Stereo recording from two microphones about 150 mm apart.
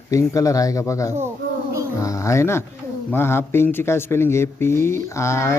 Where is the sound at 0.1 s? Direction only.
20° left (ahead or behind).